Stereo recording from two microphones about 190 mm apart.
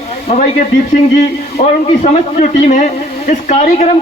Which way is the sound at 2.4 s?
40° left (ahead or behind).